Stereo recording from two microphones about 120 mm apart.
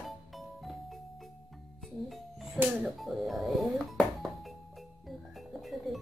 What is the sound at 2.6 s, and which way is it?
Speech, centre (ahead or behind).